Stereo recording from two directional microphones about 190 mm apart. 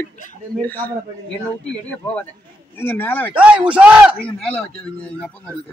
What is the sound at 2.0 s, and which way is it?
Speech, 5° left (ahead or behind).